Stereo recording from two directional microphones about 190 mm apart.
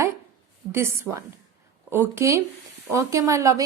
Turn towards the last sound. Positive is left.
turn(degrees=-15)  # may be behind; listen again after turning